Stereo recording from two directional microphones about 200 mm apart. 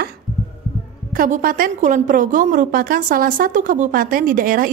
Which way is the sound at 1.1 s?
45° right (ahead or behind).